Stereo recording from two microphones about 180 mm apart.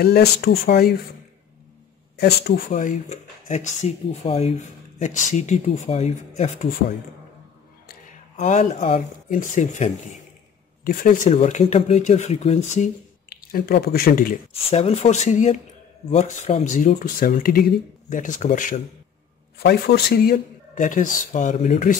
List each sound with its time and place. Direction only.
0.0 s speech: 60° left (ahead or behind)
2.1 s speech: 65° left (ahead or behind)
2.7 s speech: 40° left (ahead or behind)
8.4 s speech: 40° left (ahead or behind)
13.3 s speech: 60° left (ahead or behind)
14.5 s speech: 35° left (ahead or behind)
19.6 s speech: 65° left (ahead or behind); by 21.9 s 45° left (ahead or behind)